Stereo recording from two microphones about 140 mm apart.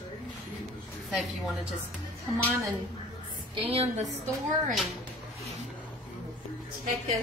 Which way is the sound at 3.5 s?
45° right (ahead or behind).